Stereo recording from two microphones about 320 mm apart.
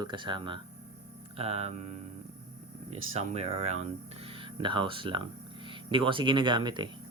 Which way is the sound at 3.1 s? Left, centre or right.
Centre.